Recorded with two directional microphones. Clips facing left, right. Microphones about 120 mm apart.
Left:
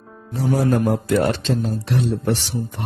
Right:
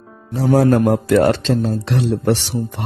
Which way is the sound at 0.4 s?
90° right.